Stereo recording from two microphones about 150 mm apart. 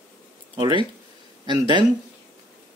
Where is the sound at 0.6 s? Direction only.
35° right (ahead or behind).